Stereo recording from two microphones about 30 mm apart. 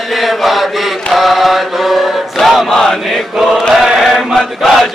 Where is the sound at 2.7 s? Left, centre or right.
Centre.